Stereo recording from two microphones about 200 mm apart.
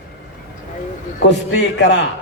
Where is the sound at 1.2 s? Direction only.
60° left (ahead or behind).